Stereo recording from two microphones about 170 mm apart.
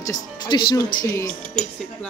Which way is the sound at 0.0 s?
20° left (ahead or behind).